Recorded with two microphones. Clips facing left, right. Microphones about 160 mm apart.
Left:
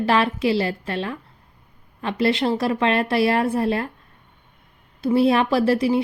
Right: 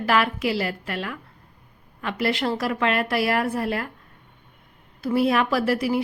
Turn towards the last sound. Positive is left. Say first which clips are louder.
# left 4 dB
turn(degrees=25)  # may be behind; listen again after turning